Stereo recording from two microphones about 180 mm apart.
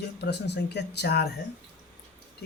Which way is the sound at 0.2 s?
70° left (ahead or behind).